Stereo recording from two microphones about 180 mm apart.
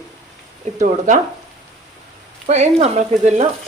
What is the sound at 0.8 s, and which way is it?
Speech, 45° right (ahead or behind).